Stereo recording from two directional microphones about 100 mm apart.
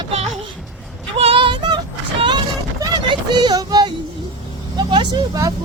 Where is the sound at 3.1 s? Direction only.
50° right (ahead or behind).